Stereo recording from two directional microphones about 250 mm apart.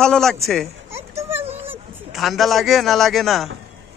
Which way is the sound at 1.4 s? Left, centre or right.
Right.